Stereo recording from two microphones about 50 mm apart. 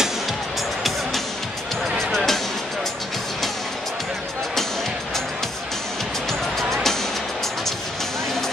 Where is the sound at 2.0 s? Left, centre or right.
Centre.